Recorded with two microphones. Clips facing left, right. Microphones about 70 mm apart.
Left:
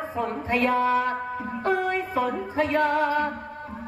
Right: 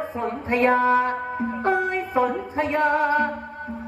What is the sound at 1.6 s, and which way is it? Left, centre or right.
Music, right.